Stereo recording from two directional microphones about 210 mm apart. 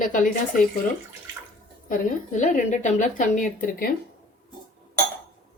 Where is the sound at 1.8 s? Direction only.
40° left (ahead or behind).